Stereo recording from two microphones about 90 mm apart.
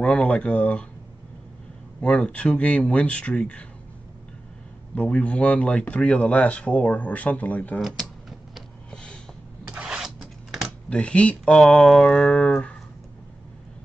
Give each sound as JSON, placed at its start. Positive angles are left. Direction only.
{"t": 0.0, "sound": "speech", "side_deg": 15}
{"t": 2.0, "sound": "speech", "side_deg": 15}
{"t": 4.9, "sound": "speech", "side_deg": 15}
{"t": 7.8, "sound": "a sound", "side_deg": 0}
{"t": 9.7, "sound": "vehicle", "side_deg": -10}
{"t": 10.2, "sound": "computer keyboard", "side_deg": 0}
{"t": 10.9, "sound": "speech", "side_deg": 15}
{"t": 11.6, "sound": "a sound", "side_deg": 0}